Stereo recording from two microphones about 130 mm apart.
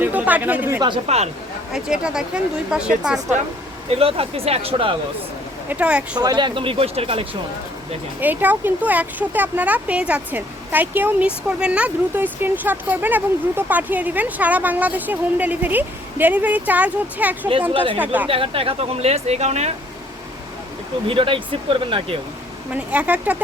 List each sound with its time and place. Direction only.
0.0 s chatter: 10° right (ahead or behind)
1.0 s speech: 55° right (ahead or behind)
1.7 s speech: 5° right (ahead or behind)
3.8 s speech: 50° right (ahead or behind)
5.6 s speech: 10° right (ahead or behind)
6.1 s speech: 35° right (ahead or behind); by 7.3 s 50° right (ahead or behind)
8.2 s speech: 15° right (ahead or behind)
18.3 s speech: 45° right (ahead or behind)
21.1 s speech: 40° right (ahead or behind)
22.7 s speech: 10° right (ahead or behind)